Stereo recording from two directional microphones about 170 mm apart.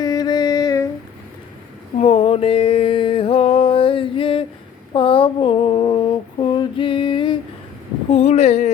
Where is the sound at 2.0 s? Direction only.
35° left (ahead or behind).